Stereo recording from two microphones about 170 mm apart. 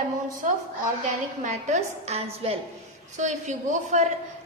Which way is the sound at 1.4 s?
45° right (ahead or behind).